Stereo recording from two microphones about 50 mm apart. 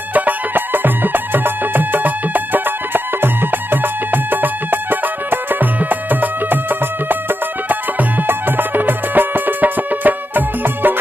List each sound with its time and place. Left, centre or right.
0.1 s music: right